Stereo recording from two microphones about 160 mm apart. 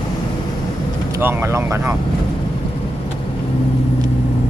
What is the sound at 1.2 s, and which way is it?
Speech, 15° right (ahead or behind).